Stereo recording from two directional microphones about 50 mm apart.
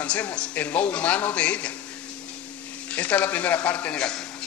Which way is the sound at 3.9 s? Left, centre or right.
Centre.